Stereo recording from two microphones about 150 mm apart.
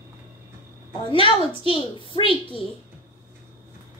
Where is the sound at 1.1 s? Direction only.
35° left (ahead or behind).